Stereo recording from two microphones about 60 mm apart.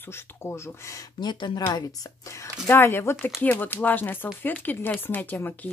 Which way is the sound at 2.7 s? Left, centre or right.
Left.